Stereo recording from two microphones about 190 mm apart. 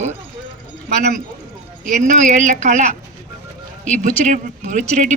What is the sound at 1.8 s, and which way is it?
Speech, 40° right (ahead or behind).